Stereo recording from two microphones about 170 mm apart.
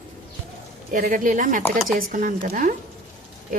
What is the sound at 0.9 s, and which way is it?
Speech, 50° right (ahead or behind).